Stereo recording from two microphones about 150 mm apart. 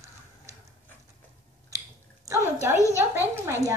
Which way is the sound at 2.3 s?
15° right (ahead or behind).